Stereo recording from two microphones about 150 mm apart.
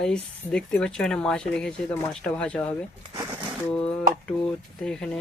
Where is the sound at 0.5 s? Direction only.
5° left (ahead or behind).